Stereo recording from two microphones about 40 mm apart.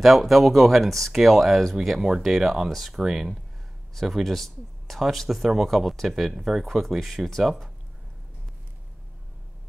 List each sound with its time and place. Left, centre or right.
0.0 s speech: centre
2.0 s speech: centre
3.0 s speech: centre
4.1 s speech: centre